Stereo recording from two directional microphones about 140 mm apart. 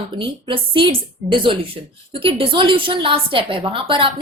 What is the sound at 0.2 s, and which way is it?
A woman's voice, 35° right (ahead or behind).